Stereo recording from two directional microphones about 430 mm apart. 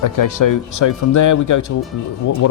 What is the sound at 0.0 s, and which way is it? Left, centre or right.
Speech, left.